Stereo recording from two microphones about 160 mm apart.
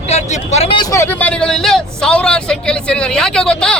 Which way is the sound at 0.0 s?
45° left (ahead or behind).